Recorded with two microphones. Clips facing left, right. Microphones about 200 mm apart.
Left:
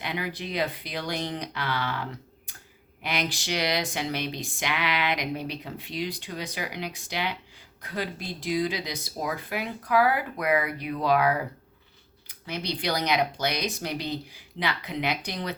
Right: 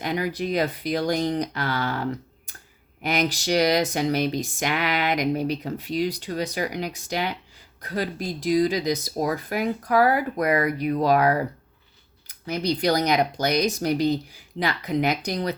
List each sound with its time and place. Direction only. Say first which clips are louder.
0.0 s speech: right 7 dB; 45° right (ahead or behind)